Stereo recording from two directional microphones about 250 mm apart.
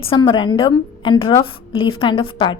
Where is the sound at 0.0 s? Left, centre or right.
Left.